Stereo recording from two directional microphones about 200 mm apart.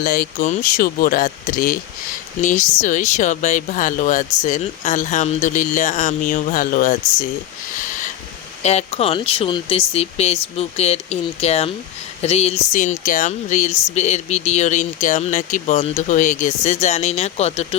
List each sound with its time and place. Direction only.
0.0 s speech: 45° left (ahead or behind)
8.6 s speech: 30° left (ahead or behind)